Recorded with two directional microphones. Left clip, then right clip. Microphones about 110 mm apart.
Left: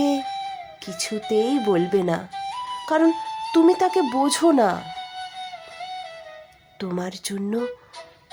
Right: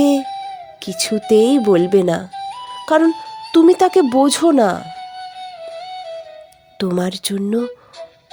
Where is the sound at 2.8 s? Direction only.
65° right (ahead or behind).